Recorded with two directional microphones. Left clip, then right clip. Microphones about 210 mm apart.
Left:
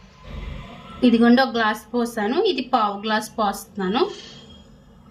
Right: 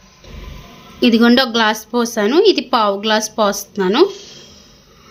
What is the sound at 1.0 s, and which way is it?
A woman's voice, 50° right (ahead or behind).